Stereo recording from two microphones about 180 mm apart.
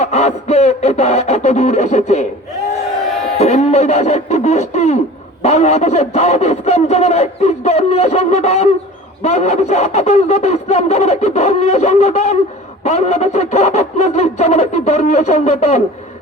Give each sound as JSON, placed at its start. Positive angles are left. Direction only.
{"t": 0.0, "sound": "speech", "side_deg": 35}
{"t": 3.3, "sound": "speech", "side_deg": 35}